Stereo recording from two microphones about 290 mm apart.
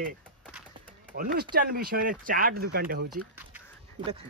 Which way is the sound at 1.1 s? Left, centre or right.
Right.